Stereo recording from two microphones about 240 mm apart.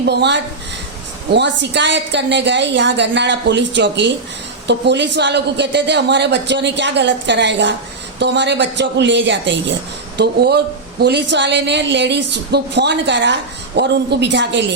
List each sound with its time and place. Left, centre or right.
0.1 s speech: right